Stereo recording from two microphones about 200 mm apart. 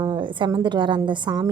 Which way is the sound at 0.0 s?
25° right (ahead or behind).